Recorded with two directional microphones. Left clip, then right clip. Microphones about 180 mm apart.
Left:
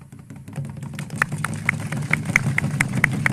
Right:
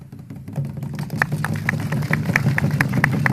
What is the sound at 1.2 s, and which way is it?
Vehicle, 30° right (ahead or behind).